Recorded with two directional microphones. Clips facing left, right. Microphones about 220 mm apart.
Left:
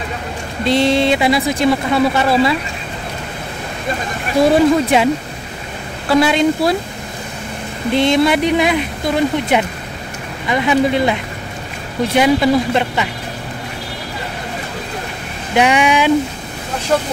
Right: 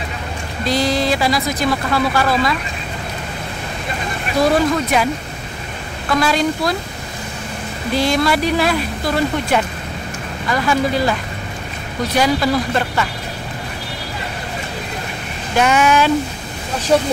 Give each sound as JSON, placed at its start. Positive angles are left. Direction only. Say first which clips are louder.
{"t": 0.7, "sound": "speech", "louder": "left 4 dB", "side_deg": 25}
{"t": 4.4, "sound": "speech", "louder": "left 4 dB", "side_deg": 25}
{"t": 7.9, "sound": "speech", "louder": "left 3 dB", "side_deg": 25}
{"t": 15.5, "sound": "speech", "louder": "left 1 dB", "side_deg": 15}